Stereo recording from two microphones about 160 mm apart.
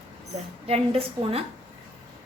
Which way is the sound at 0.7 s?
35° right (ahead or behind).